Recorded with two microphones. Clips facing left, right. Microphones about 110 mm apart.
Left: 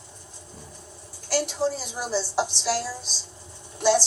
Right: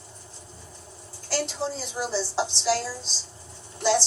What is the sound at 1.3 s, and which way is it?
A woman's voice, 15° left (ahead or behind).